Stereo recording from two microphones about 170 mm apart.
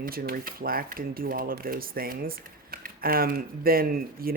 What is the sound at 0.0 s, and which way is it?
Speech, 60° right (ahead or behind).